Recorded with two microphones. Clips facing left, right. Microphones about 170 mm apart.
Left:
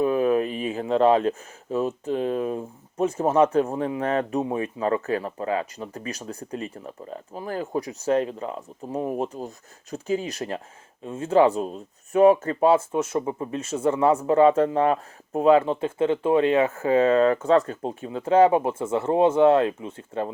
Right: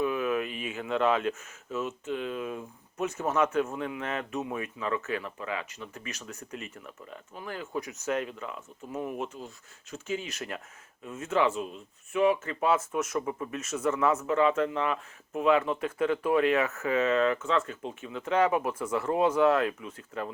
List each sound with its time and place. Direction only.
0.0 s speech: 35° left (ahead or behind)